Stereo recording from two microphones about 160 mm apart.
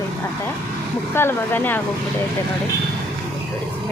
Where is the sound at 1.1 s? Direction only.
15° left (ahead or behind).